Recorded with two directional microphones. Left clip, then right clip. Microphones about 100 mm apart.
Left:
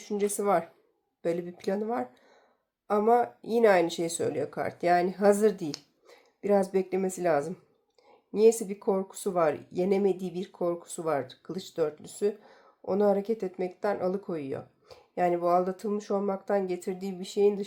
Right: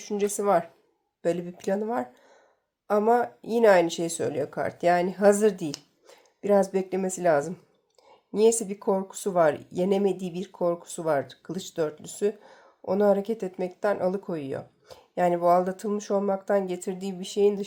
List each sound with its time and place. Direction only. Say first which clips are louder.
0.0 s speech: right 2 dB; 20° right (ahead or behind)
1.2 s speech: right 3 dB; 30° right (ahead or behind)